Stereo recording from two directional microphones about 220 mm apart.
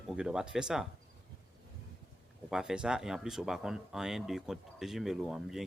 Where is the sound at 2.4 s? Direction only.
5° right (ahead or behind).